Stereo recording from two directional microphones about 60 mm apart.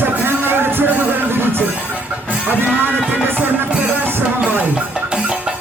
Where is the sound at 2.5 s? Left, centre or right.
Right.